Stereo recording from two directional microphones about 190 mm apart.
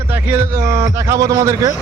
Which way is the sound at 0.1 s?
10° right (ahead or behind).